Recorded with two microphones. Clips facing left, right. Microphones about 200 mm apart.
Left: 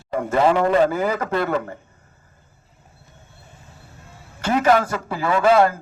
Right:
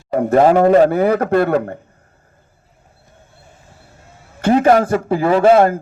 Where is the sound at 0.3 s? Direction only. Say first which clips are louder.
Right 6 dB; 40° right (ahead or behind).